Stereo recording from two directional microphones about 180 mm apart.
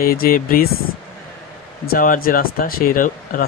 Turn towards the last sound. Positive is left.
turn(degrees=50)  # may be behind; listen again after turning